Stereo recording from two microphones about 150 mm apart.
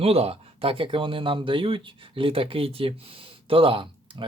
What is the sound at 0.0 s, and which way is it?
Speech, 40° right (ahead or behind).